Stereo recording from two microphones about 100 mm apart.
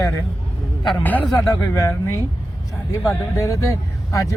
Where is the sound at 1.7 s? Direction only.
35° left (ahead or behind).